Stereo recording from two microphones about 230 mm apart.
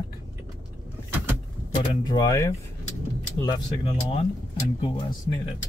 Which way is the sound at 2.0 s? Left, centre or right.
Centre.